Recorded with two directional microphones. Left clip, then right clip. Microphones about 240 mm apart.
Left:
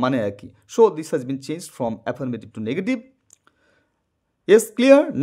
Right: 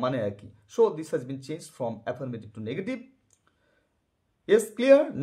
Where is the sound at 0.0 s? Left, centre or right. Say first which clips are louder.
Left 6 dB; left.